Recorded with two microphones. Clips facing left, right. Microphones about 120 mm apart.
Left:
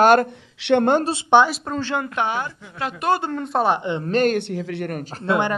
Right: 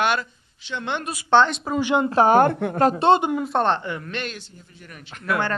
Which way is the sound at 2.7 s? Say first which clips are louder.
Right 7 dB; 40° right (ahead or behind).